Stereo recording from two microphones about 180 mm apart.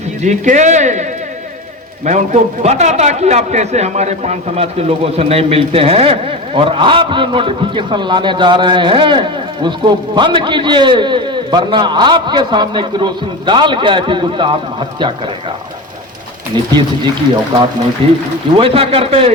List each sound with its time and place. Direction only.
0.2 s speech: 40° right (ahead or behind)
2.0 s a man's voice: 40° right (ahead or behind)
16.5 s a man's voice: 25° right (ahead or behind)
18.0 s a man's voice: 30° right (ahead or behind)